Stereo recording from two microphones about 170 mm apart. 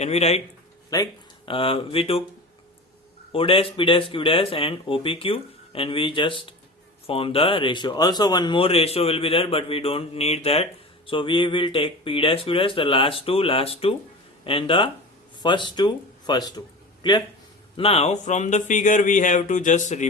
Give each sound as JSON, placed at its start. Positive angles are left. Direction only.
{"t": 0.0, "sound": "speech", "side_deg": 40}
{"t": 0.9, "sound": "speech", "side_deg": 20}
{"t": 3.3, "sound": "a man's voice", "side_deg": 35}
{"t": 17.7, "sound": "speech", "side_deg": 35}